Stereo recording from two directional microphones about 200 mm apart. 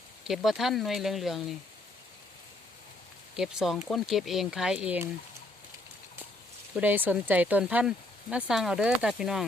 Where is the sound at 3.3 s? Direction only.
Centre (ahead or behind).